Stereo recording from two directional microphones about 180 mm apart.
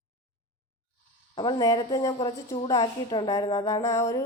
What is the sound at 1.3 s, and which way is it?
A woman's voice, 25° left (ahead or behind).